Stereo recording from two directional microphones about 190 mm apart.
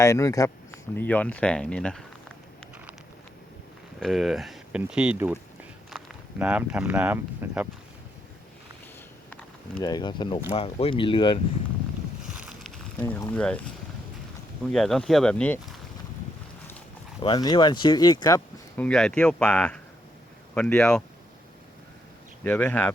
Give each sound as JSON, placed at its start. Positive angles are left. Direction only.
{"t": 0.0, "sound": "speech", "side_deg": 15}
{"t": 4.0, "sound": "speech", "side_deg": 0}
{"t": 5.9, "sound": "walk", "side_deg": 0}
{"t": 6.4, "sound": "speech", "side_deg": -5}
{"t": 9.7, "sound": "speech", "side_deg": 20}
{"t": 12.3, "sound": "boat", "side_deg": -5}
{"t": 13.0, "sound": "speech", "side_deg": 15}
{"t": 14.7, "sound": "speech", "side_deg": 0}
{"t": 17.2, "sound": "speech", "side_deg": 25}
{"t": 18.8, "sound": "speech", "side_deg": 5}
{"t": 22.4, "sound": "speech", "side_deg": 10}